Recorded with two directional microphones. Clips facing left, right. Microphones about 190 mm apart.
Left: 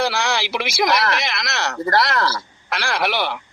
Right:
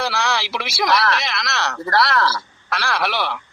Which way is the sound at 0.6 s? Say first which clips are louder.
Even; 20° left (ahead or behind).